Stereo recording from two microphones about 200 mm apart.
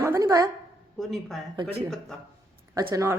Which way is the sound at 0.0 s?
15° right (ahead or behind).